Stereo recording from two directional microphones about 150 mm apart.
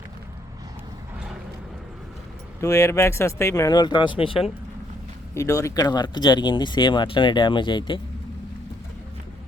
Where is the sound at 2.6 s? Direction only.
20° left (ahead or behind); by 4.5 s 35° left (ahead or behind).